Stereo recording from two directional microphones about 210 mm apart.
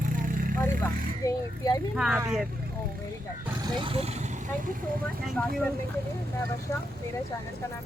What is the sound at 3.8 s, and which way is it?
Speech, 25° right (ahead or behind).